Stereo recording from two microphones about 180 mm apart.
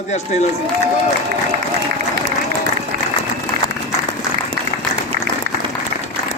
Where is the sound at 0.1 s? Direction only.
40° left (ahead or behind).